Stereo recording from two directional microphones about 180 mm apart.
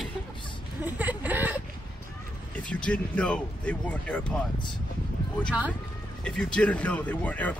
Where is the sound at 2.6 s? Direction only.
5° left (ahead or behind).